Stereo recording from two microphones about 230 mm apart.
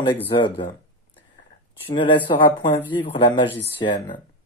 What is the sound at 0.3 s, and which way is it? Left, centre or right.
Speech, left.